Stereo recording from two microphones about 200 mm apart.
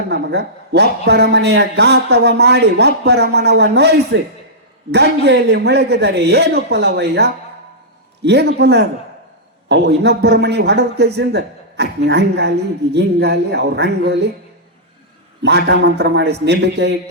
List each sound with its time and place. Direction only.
0.1 s a man's voice: 60° right (ahead or behind)
15.4 s a man's voice: 55° right (ahead or behind)